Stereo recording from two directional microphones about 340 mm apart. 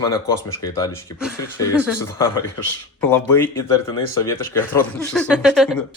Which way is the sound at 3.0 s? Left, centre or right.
Centre.